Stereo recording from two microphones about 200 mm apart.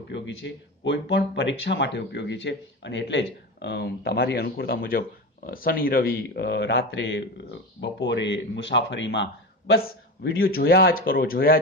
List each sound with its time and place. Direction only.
0.1 s speech: 65° left (ahead or behind)